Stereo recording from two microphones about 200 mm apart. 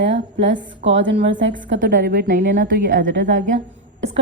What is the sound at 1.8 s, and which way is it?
Speech, 50° right (ahead or behind).